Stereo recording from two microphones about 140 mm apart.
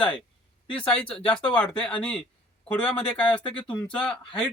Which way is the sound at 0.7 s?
10° left (ahead or behind).